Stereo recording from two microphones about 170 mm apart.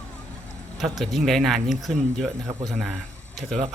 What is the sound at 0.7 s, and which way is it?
Speech, centre (ahead or behind).